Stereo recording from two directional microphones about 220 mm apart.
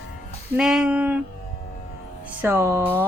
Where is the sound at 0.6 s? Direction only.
5° right (ahead or behind).